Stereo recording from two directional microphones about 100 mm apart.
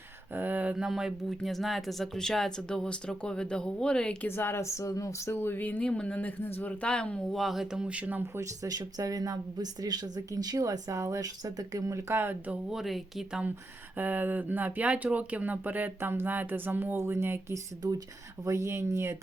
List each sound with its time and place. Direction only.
0.3 s mantra: 20° right (ahead or behind)
0.9 s speech: 5° right (ahead or behind)
4.3 s speech: 25° left (ahead or behind); by 8.2 s 15° right (ahead or behind)
8.4 s speech: 35° right (ahead or behind); by 12.5 s 20° right (ahead or behind)
12.7 s speech: centre (ahead or behind)
13.9 s speech: 15° right (ahead or behind)